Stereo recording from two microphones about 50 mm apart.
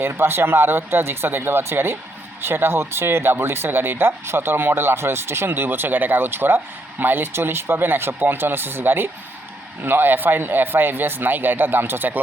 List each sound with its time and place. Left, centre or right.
0.0 s speech: right
5.5 s speech: right